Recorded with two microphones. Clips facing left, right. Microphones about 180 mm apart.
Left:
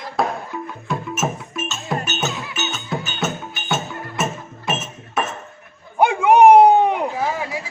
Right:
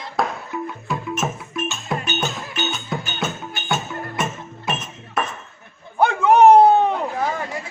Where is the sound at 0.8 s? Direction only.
5° left (ahead or behind).